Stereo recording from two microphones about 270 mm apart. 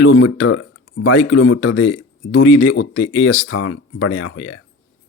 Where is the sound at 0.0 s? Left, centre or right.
Left.